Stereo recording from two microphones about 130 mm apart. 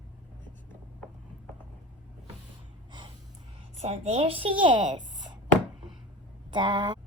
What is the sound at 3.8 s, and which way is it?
A woman's voice, 55° right (ahead or behind).